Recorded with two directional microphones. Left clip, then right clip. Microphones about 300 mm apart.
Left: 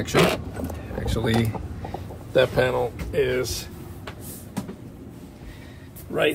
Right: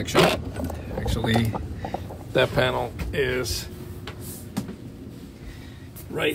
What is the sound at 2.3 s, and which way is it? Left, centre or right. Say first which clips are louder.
Speech: left 2 dB; centre.